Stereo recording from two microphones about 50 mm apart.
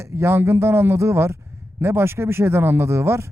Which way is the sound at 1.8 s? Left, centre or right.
Right.